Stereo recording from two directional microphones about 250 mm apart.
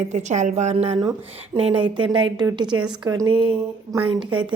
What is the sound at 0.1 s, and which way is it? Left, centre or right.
A woman's voice, right.